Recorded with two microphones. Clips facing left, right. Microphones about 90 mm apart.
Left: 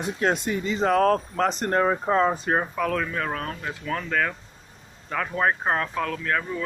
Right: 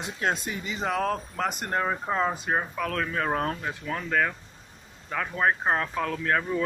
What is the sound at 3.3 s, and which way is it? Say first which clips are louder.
Speech: right 3 dB; 35° right (ahead or behind).